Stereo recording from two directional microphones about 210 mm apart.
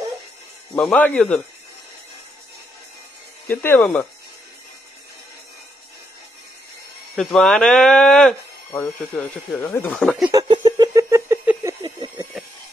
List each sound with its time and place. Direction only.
0.7 s speech: 5° left (ahead or behind)
3.4 s speech: 10° left (ahead or behind)
7.2 s speech: centre (ahead or behind)
9.9 s speech: 5° right (ahead or behind)
10.3 s a sound: 20° right (ahead or behind)